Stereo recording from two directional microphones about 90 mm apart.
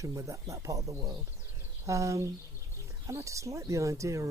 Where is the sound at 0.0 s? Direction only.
35° right (ahead or behind).